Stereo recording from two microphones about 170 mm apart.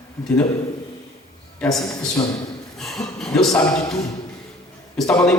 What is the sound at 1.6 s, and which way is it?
A man's voice, centre (ahead or behind).